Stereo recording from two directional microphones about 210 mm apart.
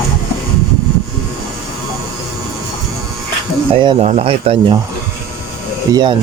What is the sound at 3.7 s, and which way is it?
Speech, 30° right (ahead or behind).